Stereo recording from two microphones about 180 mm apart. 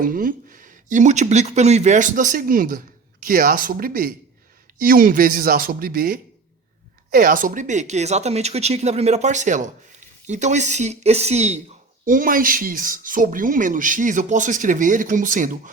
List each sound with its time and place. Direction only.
0.0 s speech: 50° right (ahead or behind)
12.0 s speech: 50° right (ahead or behind)